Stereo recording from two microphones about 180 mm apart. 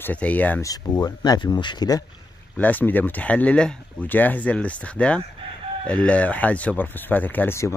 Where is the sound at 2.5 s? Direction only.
10° left (ahead or behind).